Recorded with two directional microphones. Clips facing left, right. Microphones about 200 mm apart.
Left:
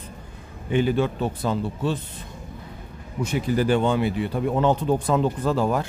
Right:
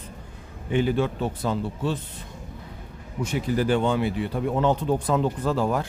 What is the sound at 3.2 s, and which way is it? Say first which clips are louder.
Speech: left 2 dB; 15° left (ahead or behind).